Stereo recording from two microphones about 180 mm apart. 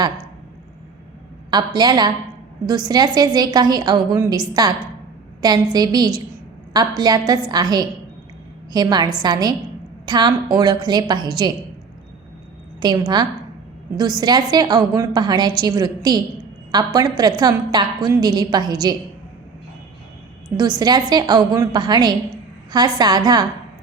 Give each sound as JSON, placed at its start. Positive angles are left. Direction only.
{"t": 1.5, "sound": "a woman's voice", "side_deg": -25}
{"t": 5.7, "sound": "a woman's voice", "side_deg": -20}
{"t": 12.8, "sound": "a woman's voice", "side_deg": -25}
{"t": 20.6, "sound": "a woman's voice", "side_deg": -20}